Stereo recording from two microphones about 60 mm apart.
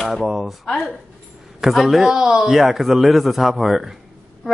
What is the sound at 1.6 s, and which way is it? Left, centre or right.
Speech, centre.